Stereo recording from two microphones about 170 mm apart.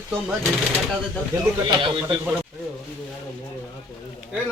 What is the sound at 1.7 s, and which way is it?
Speech, 30° right (ahead or behind).